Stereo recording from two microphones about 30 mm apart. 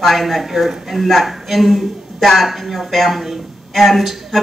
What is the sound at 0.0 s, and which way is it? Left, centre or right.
Speech, centre.